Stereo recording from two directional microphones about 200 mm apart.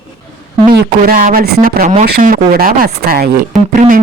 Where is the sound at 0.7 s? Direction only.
50° right (ahead or behind).